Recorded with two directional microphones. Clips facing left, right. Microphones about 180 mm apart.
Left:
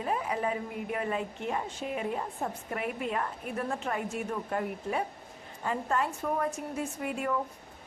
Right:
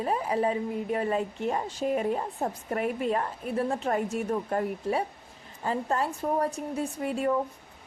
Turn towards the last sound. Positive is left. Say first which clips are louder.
# right 5 dB
turn(degrees=-30)  # may be behind; listen again after turning